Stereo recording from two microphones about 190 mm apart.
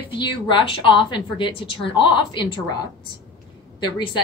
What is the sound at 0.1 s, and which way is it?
A woman's voice, 25° left (ahead or behind).